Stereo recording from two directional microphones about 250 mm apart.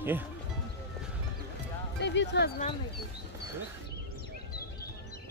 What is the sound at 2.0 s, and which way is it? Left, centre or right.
Speech, left.